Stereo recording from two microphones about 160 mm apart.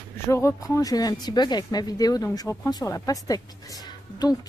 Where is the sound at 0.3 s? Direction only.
20° left (ahead or behind).